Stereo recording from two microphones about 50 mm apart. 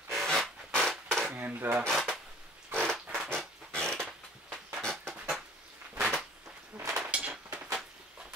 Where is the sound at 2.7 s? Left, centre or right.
Centre.